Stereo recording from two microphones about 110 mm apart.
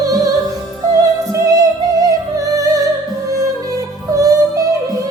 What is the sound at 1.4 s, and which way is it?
Music, 35° right (ahead or behind).